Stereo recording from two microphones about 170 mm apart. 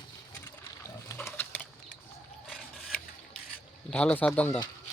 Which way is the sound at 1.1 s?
15° left (ahead or behind).